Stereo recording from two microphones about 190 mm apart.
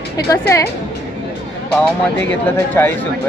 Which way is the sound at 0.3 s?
15° left (ahead or behind).